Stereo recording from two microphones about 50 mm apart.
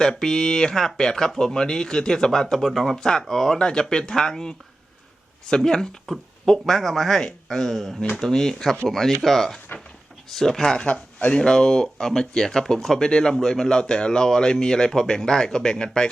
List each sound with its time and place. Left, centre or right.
0.0 s speech: centre
11.2 s speech: left
11.4 s speech: centre